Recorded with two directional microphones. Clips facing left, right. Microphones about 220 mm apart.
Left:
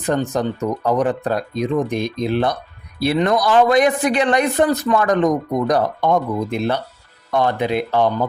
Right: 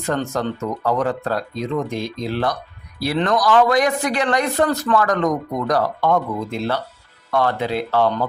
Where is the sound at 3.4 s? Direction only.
25° left (ahead or behind).